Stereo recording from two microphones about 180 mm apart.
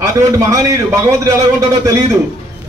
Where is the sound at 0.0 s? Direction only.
20° right (ahead or behind).